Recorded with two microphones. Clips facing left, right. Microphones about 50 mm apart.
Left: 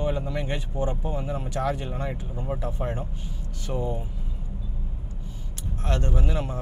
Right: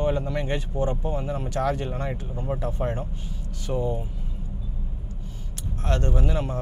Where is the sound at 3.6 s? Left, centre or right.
Left.